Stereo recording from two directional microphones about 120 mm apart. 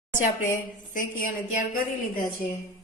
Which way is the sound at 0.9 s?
90° left.